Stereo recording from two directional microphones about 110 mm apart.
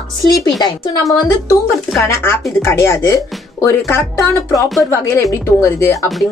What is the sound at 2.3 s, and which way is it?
Speech, 25° left (ahead or behind).